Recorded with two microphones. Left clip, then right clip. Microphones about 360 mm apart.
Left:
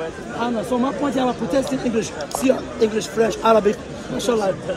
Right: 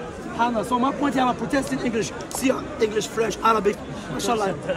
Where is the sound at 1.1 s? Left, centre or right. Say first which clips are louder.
Left 2 dB; centre.